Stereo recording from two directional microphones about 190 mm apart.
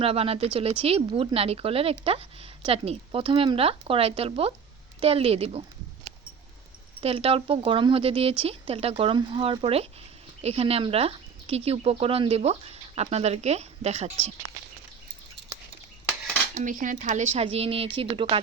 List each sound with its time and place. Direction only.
0.0 s speech: 30° right (ahead or behind)
7.0 s speech: 30° right (ahead or behind)
15.4 s a sound: 70° right (ahead or behind)
16.6 s speech: 40° right (ahead or behind)